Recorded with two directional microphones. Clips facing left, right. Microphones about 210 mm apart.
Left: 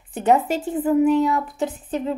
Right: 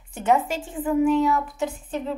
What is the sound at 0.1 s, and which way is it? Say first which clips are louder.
A woman's voice: left 3 dB; 35° left (ahead or behind).